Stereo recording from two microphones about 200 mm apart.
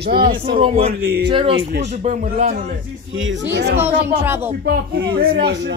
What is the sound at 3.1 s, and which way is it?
Speech, 75° right (ahead or behind).